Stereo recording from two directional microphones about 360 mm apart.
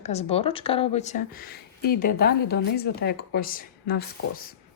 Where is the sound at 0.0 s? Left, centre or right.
Centre.